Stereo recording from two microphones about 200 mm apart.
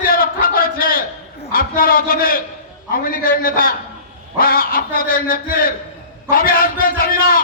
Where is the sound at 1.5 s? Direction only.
45° left (ahead or behind).